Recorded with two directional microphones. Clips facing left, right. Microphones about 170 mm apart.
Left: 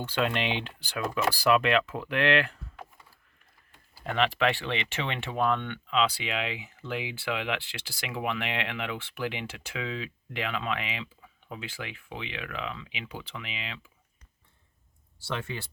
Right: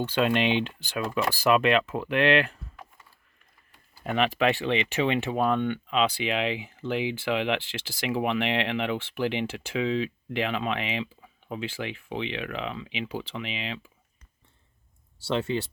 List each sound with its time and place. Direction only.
0.1 s speech: 20° right (ahead or behind)
4.0 s speech: 15° right (ahead or behind)
15.3 s speech: 25° right (ahead or behind)